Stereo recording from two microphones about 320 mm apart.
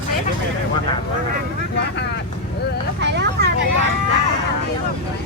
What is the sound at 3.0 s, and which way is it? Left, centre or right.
Vehicle, right.